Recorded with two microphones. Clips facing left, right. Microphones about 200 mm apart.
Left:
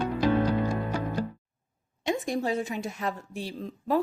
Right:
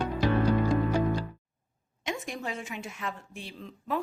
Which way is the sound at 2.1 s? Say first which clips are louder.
Left 7 dB; 35° left (ahead or behind).